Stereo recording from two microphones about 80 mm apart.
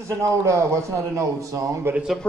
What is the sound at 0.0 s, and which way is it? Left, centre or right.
A man's voice, right.